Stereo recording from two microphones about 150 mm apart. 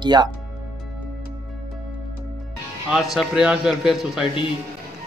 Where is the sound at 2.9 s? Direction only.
Centre (ahead or behind).